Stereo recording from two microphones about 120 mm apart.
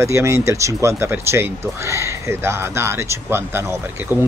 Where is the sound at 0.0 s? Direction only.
25° right (ahead or behind).